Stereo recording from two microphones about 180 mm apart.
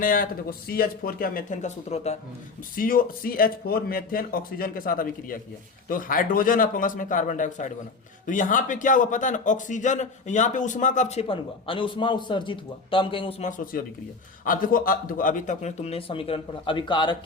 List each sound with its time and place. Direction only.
0.0 s a man's voice: 50° left (ahead or behind)
2.7 s a man's voice: 50° left (ahead or behind); by 13.5 s 30° left (ahead or behind)
13.7 s a man's voice: 50° left (ahead or behind); by 17.2 s 25° left (ahead or behind)